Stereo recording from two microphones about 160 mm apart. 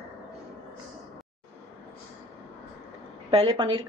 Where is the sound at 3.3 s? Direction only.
30° right (ahead or behind).